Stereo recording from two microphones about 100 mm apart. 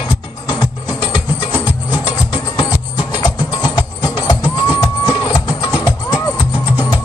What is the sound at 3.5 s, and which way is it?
Music, 45° left (ahead or behind).